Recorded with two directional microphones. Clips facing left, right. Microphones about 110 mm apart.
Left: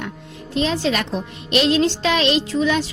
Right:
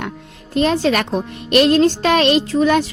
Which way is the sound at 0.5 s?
50° right (ahead or behind).